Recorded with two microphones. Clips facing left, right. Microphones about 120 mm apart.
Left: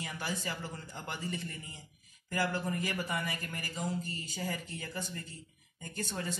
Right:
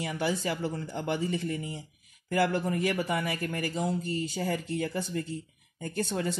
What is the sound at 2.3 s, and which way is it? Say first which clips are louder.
Speech: right 7 dB; 70° right (ahead or behind).